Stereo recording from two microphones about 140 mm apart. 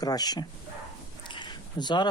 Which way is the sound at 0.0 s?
30° left (ahead or behind).